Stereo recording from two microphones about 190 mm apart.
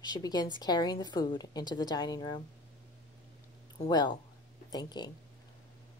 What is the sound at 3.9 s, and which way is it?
Speech, 20° left (ahead or behind).